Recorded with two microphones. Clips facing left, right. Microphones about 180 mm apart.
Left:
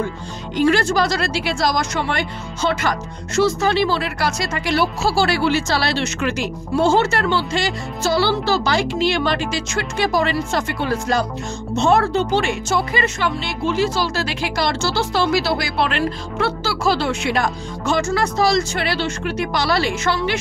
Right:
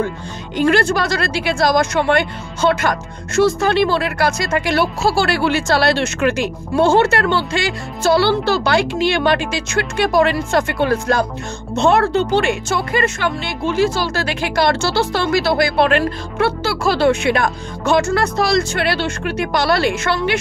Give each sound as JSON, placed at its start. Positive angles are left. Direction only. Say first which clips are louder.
{"t": 0.6, "sound": "speech", "louder": "right 1 dB", "side_deg": -60}